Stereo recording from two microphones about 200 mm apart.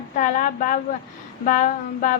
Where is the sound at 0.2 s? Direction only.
40° left (ahead or behind).